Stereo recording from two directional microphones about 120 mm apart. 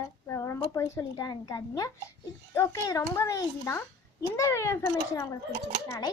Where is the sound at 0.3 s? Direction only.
25° left (ahead or behind).